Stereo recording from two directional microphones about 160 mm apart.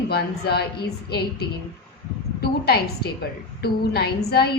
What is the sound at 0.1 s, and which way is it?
A woman's voice, 85° left.